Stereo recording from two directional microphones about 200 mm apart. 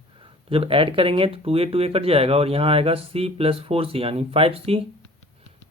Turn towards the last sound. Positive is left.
turn(degrees=-30)  # may be behind; listen again after turning